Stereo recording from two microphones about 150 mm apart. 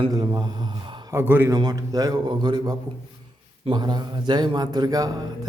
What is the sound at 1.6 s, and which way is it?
Speech, 25° right (ahead or behind).